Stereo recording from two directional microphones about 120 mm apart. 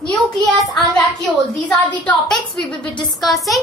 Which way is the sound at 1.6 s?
10° left (ahead or behind).